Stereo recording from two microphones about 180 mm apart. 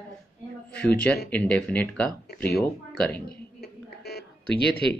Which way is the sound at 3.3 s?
60° left (ahead or behind).